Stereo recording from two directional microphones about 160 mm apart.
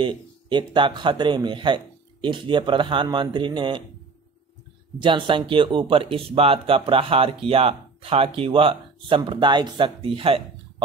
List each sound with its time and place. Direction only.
0.0 s speech: 30° right (ahead or behind)
5.0 s speech: 30° right (ahead or behind)